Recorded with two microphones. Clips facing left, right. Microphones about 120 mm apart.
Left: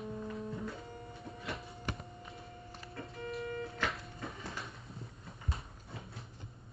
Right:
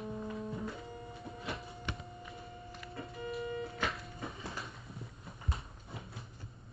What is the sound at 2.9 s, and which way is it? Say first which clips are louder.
Music: right 1 dB; centre (ahead or behind).